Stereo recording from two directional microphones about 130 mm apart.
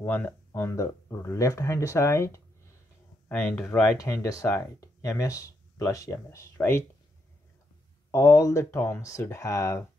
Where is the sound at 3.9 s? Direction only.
25° left (ahead or behind).